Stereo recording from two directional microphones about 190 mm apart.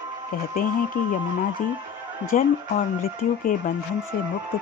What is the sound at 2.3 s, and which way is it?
Speech, 40° left (ahead or behind).